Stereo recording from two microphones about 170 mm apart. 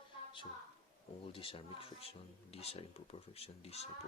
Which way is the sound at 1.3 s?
30° left (ahead or behind).